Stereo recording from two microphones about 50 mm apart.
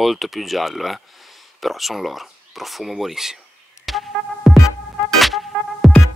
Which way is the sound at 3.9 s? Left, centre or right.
Centre.